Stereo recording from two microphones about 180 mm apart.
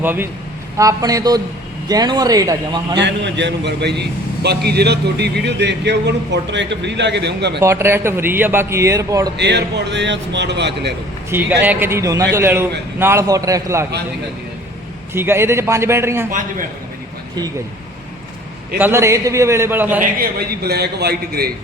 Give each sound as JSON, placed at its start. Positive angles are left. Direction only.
{"t": 0.0, "sound": "a man's voice", "side_deg": -10}
{"t": 3.0, "sound": "speech", "side_deg": -75}
{"t": 7.6, "sound": "a man's voice", "side_deg": -15}
{"t": 9.4, "sound": "speech", "side_deg": -70}
{"t": 11.3, "sound": "a man's voice", "side_deg": -10}
{"t": 15.1, "sound": "a man's voice", "side_deg": -15}
{"t": 18.8, "sound": "a man's voice", "side_deg": -15}
{"t": 20.0, "sound": "a man's voice", "side_deg": -55}